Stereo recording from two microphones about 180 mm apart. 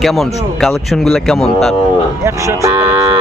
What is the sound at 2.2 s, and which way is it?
Speech, 15° right (ahead or behind).